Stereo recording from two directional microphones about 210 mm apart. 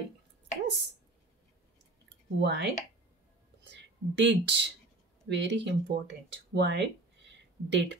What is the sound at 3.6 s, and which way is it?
Speech, 60° right (ahead or behind).